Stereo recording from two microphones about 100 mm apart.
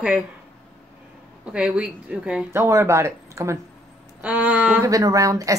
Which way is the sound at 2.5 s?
25° right (ahead or behind).